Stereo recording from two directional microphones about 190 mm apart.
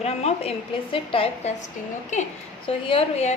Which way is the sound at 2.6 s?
30° left (ahead or behind).